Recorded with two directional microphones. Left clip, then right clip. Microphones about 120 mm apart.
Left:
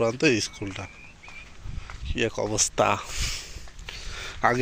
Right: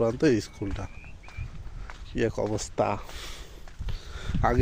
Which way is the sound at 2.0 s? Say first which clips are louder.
Left 1 dB; 35° right (ahead or behind).